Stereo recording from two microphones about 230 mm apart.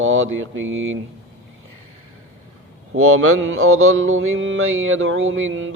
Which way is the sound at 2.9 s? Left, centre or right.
Right.